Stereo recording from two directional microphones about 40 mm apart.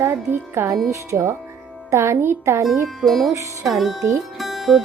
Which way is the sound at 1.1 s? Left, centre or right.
Right.